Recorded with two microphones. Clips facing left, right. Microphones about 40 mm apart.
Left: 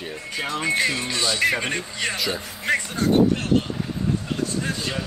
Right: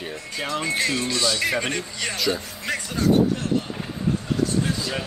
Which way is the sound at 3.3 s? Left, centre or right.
Left.